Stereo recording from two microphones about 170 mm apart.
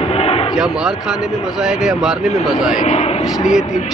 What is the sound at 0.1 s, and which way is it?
Artillery fire, 35° left (ahead or behind).